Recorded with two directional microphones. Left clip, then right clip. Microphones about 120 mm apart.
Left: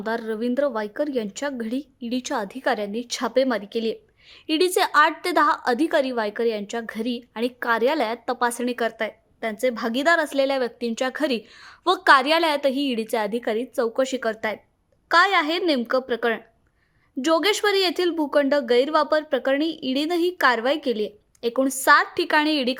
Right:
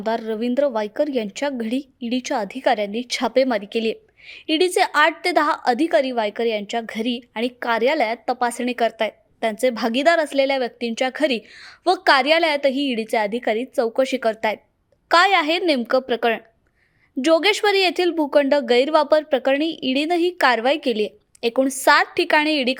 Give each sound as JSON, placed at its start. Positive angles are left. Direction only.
{"t": 0.0, "sound": "speech", "side_deg": -15}
{"t": 11.8, "sound": "a woman's voice", "side_deg": -10}